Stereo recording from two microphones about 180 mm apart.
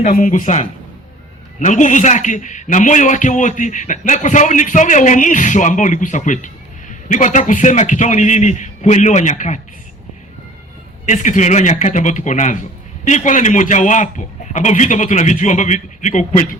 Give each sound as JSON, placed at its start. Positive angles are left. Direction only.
{"t": 0.0, "sound": "a man's voice", "side_deg": 45}
{"t": 11.0, "sound": "a man's voice", "side_deg": 45}